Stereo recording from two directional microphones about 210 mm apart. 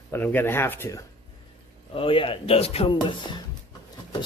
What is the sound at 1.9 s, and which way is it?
Speech, 25° left (ahead or behind).